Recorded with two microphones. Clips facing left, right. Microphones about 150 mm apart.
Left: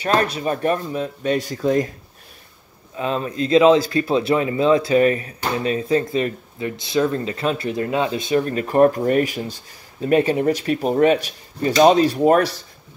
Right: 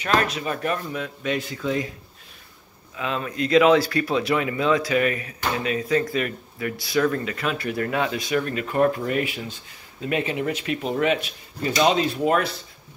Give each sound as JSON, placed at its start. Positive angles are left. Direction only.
{"t": 0.0, "sound": "speech", "side_deg": 35}
{"t": 3.0, "sound": "speech", "side_deg": 30}